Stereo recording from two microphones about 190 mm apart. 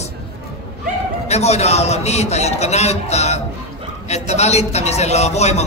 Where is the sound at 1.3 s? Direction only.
35° left (ahead or behind).